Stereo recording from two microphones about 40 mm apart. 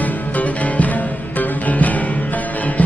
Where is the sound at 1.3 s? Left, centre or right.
Left.